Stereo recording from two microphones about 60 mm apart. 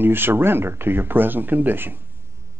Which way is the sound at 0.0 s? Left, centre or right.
Right.